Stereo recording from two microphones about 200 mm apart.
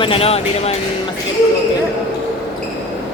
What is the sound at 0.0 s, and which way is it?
Speech, 30° left (ahead or behind).